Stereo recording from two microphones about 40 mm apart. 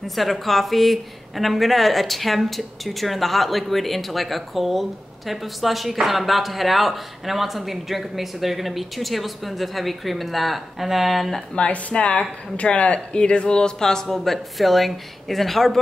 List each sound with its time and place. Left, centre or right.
0.0 s a woman's voice: centre
11.5 s a woman's voice: left; by 15.8 s centre